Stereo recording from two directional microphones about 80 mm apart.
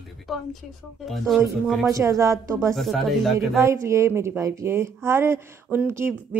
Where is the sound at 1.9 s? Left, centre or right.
Right.